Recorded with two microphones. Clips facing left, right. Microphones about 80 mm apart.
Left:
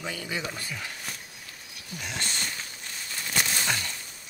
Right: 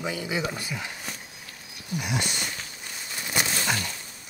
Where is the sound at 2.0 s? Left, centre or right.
Centre.